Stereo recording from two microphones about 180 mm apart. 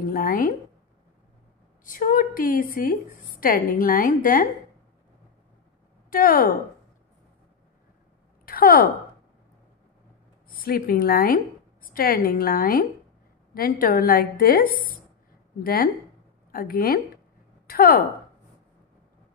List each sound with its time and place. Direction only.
0.1 s a woman's voice: 50° left (ahead or behind)
1.9 s a woman's voice: 50° left (ahead or behind)
6.0 s speech: 55° left (ahead or behind)
8.5 s speech: 55° left (ahead or behind)
10.5 s a woman's voice: 55° left (ahead or behind)